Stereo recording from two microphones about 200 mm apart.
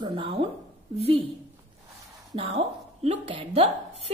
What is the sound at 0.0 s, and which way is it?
Speech, 25° right (ahead or behind).